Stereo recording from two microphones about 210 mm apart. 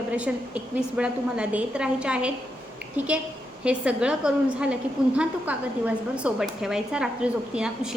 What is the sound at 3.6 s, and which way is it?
A woman's voice, 5° right (ahead or behind).